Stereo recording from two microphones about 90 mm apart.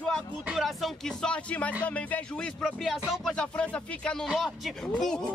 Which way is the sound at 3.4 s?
10° left (ahead or behind).